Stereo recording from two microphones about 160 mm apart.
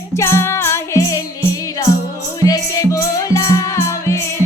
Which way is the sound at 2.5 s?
20° left (ahead or behind).